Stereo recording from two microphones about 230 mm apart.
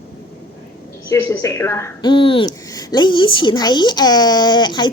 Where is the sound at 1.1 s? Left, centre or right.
Centre.